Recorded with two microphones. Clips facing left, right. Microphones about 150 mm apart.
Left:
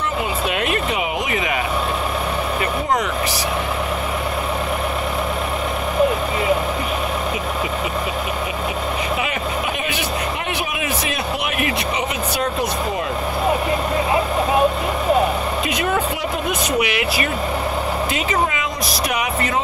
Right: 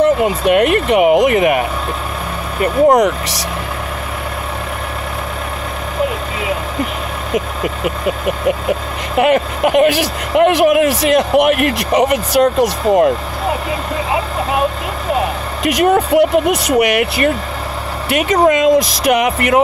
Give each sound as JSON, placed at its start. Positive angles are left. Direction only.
{"t": 0.0, "sound": "speech", "side_deg": -60}
{"t": 2.9, "sound": "speech", "side_deg": -75}
{"t": 7.3, "sound": "speech", "side_deg": -65}
{"t": 9.2, "sound": "speech", "side_deg": -70}
{"t": 16.2, "sound": "speech", "side_deg": -65}
{"t": 18.1, "sound": "speech", "side_deg": -70}